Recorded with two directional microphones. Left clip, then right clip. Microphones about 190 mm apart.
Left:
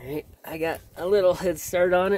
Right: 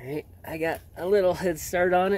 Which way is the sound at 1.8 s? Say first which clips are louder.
Left 1 dB; centre (ahead or behind).